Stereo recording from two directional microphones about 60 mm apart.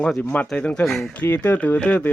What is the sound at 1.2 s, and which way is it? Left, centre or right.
Speech, left.